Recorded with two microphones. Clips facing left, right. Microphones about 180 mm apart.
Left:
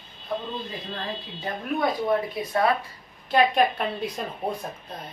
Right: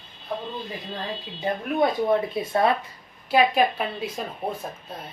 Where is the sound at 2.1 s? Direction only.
25° right (ahead or behind).